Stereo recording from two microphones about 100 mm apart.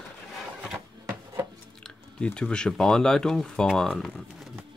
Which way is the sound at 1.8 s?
10° left (ahead or behind).